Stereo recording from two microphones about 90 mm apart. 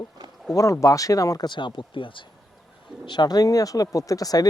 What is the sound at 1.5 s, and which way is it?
Speech, 65° left (ahead or behind).